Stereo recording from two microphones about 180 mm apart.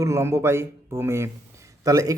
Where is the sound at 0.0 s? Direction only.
15° right (ahead or behind).